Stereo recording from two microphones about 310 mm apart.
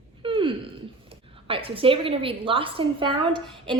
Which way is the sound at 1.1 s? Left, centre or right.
Centre.